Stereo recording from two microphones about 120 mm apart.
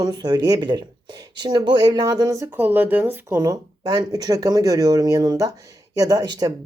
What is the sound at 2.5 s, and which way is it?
Speech, 15° right (ahead or behind).